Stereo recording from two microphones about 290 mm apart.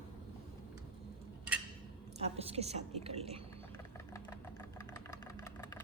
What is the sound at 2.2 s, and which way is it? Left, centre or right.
A woman's voice, right.